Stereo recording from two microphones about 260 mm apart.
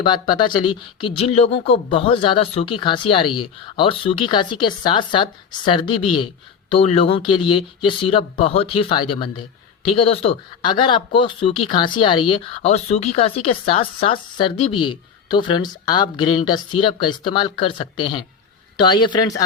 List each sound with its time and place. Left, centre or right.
0.0 s a woman's voice: centre